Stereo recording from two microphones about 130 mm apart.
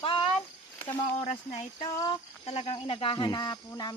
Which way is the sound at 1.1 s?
60° left (ahead or behind).